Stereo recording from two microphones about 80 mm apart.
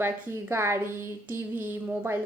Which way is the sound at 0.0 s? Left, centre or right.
Right.